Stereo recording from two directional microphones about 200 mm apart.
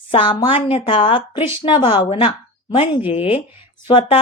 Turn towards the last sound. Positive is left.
turn(degrees=25)  # may be behind; listen again after turning